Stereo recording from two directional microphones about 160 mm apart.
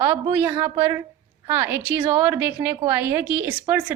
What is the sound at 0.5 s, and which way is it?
Speech, 30° right (ahead or behind).